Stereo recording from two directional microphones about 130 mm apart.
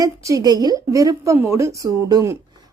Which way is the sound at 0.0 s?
25° right (ahead or behind).